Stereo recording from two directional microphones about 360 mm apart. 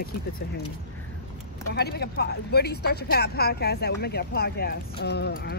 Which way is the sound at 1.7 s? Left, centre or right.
Left.